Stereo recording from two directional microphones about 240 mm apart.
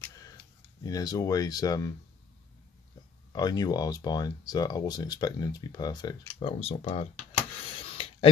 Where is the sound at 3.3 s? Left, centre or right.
Centre.